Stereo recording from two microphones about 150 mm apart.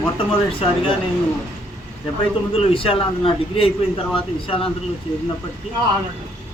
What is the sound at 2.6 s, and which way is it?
A man's voice, 40° left (ahead or behind).